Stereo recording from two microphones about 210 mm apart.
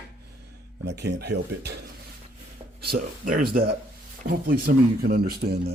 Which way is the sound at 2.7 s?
45° right (ahead or behind).